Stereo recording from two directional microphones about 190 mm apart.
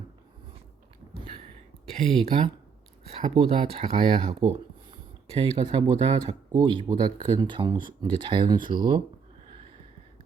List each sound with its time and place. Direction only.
2.0 s speech: centre (ahead or behind)
3.1 s speech: 30° right (ahead or behind)